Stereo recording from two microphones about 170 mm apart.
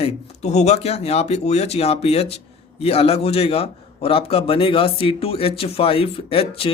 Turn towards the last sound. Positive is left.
turn(degrees=35)  # may be behind; listen again after turning